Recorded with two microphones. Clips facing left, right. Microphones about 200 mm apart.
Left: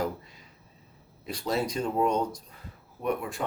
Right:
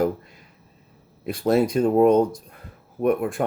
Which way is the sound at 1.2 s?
55° right (ahead or behind).